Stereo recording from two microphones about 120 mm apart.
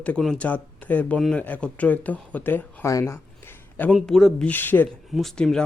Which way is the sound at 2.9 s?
20° left (ahead or behind).